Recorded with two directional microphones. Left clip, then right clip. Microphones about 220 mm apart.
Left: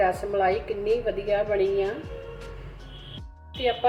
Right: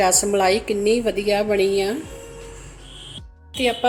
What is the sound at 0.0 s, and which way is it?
A woman's voice, 55° right (ahead or behind).